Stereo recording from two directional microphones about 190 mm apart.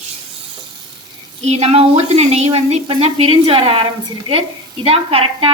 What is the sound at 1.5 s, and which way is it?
A woman's voice, 30° right (ahead or behind).